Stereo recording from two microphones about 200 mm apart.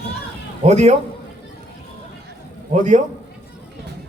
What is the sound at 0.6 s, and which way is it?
Speech, 35° right (ahead or behind).